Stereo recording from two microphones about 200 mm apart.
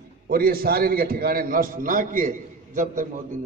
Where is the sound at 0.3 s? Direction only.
50° right (ahead or behind).